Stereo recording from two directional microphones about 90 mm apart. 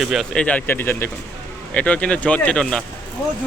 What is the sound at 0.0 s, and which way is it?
Speech, 5° right (ahead or behind).